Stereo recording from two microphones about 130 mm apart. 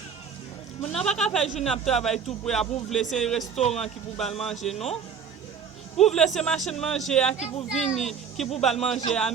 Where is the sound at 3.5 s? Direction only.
55° left (ahead or behind).